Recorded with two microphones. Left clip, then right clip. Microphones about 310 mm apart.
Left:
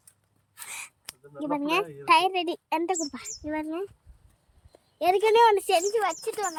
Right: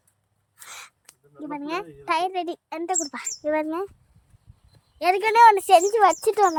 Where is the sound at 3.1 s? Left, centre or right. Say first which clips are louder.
Right 8 dB; centre.